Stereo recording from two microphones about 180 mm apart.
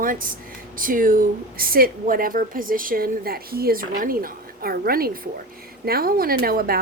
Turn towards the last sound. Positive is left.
turn(degrees=-55)  # may be behind; listen again after turning